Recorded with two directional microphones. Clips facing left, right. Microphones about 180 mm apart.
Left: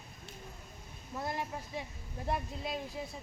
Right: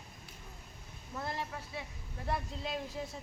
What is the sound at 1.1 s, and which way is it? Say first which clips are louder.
Speech: left 2 dB; 15° left (ahead or behind).